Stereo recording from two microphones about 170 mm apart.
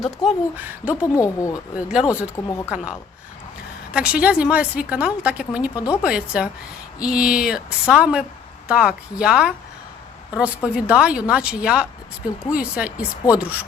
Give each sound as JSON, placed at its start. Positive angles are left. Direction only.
{"t": 0.3, "sound": "a woman's voice", "side_deg": -10}
{"t": 1.0, "sound": "speech", "side_deg": 20}
{"t": 1.7, "sound": "a woman's voice", "side_deg": -5}
{"t": 5.7, "sound": "speech", "side_deg": 20}
{"t": 6.0, "sound": "a woman's voice", "side_deg": -5}